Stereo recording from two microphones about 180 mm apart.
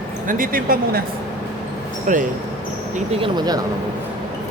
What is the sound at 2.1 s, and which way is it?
Speech, 50° right (ahead or behind).